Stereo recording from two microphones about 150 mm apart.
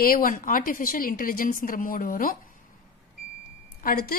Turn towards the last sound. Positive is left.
turn(degrees=75)  # may be behind; listen again after turning